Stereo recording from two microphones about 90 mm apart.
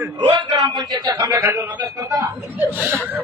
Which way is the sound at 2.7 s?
20° right (ahead or behind).